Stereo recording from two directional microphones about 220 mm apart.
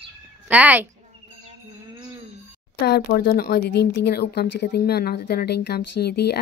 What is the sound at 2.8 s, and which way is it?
A woman's voice, 45° left (ahead or behind).